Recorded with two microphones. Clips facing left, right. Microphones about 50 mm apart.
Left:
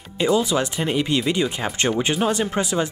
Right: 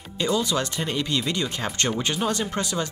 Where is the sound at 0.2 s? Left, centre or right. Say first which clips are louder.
Left 4 dB; centre.